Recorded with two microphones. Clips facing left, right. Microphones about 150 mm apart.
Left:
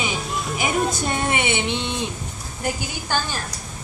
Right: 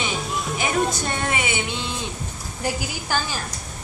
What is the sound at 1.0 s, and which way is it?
Music, 20° left (ahead or behind).